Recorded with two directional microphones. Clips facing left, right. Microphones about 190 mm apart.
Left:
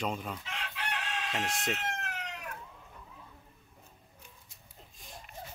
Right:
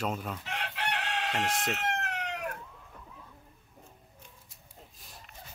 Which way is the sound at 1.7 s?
65° right (ahead or behind).